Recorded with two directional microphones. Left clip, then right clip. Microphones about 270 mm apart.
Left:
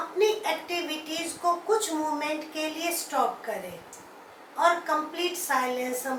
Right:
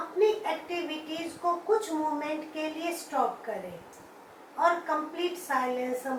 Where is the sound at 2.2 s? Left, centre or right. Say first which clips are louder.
Left 3 dB; centre.